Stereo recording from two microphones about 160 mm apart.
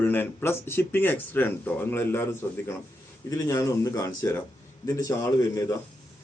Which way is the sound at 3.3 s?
20° left (ahead or behind).